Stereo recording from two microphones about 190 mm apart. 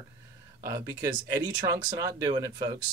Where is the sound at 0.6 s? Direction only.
20° right (ahead or behind).